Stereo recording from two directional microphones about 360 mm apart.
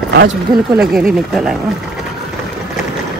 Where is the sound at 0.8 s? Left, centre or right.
Centre.